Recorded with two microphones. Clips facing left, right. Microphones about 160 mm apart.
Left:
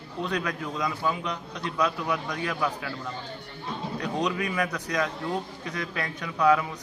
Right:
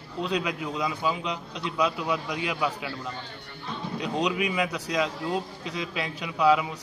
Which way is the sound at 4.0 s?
15° right (ahead or behind).